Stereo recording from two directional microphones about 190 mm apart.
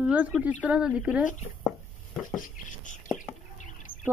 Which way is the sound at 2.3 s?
40° left (ahead or behind).